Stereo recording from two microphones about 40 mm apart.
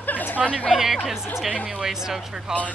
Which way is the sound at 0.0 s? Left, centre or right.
Left.